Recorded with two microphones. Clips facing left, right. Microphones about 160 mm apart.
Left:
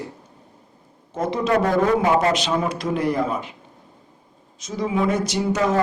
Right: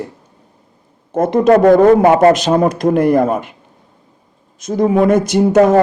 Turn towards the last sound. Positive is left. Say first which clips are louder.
# right 11 dB
turn(degrees=-55)  # may be behind; listen again after turning